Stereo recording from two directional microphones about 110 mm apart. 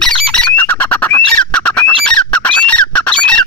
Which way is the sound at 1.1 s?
10° left (ahead or behind).